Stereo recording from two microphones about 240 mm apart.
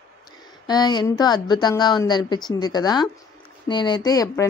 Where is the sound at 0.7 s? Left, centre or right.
Centre.